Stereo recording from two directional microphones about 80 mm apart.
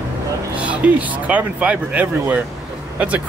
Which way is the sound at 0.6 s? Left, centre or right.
Centre.